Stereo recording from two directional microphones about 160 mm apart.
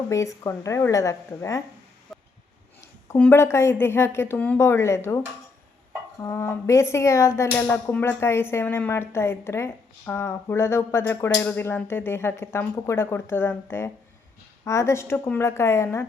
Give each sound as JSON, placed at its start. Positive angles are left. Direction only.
{"t": 0.1, "sound": "a woman's voice", "side_deg": 20}
{"t": 2.1, "sound": "a sound", "side_deg": 0}
{"t": 3.2, "sound": "speech", "side_deg": 15}